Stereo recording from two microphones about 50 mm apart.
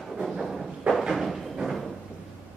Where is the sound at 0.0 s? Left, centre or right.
Centre.